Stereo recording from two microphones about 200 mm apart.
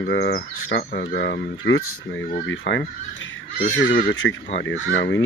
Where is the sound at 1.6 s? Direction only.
80° left.